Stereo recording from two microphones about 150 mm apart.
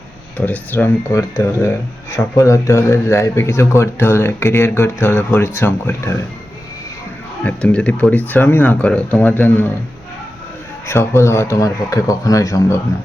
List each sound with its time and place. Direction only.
0.3 s speech: 10° left (ahead or behind)
7.4 s speech: 10° left (ahead or behind)
10.8 s speech: 20° left (ahead or behind)